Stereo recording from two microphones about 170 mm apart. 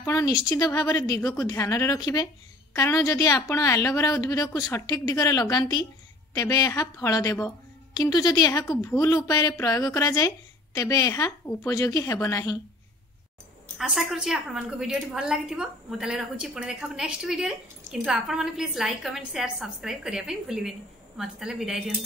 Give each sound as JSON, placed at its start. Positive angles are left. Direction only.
{"t": 0.0, "sound": "a woman's voice", "side_deg": 20}
{"t": 13.7, "sound": "a woman's voice", "side_deg": 0}